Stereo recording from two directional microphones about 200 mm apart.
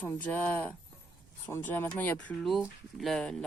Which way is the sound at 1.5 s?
10° left (ahead or behind).